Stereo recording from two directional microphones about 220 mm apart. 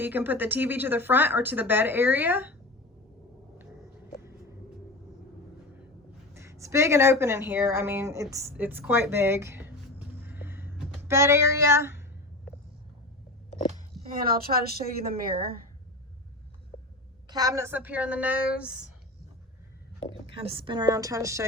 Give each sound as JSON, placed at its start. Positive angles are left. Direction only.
{"t": 0.0, "sound": "speech", "side_deg": -10}
{"t": 6.3, "sound": "speech", "side_deg": -10}
{"t": 10.2, "sound": "a sound", "side_deg": -10}
{"t": 14.1, "sound": "a woman's voice", "side_deg": -40}
{"t": 17.2, "sound": "speech", "side_deg": -15}
{"t": 20.3, "sound": "a woman's voice", "side_deg": -25}